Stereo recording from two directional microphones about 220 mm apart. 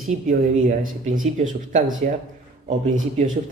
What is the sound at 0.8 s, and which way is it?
Speech, 35° right (ahead or behind).